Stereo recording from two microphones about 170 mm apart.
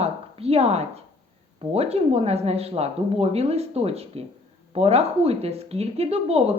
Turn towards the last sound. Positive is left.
turn(degrees=-35)  # may be behind; listen again after turning